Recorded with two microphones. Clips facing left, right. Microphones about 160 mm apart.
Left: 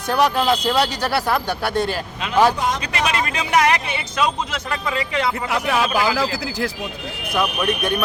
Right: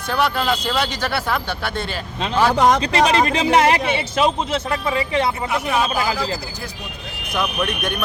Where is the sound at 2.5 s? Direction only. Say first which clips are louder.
Right 7 dB; 70° right (ahead or behind).